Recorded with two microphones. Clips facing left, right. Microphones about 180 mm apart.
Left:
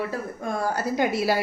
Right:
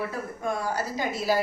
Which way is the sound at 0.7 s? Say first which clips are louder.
Left 5 dB; 65° left (ahead or behind).